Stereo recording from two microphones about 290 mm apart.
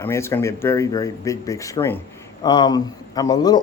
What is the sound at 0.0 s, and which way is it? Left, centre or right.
Speech, centre.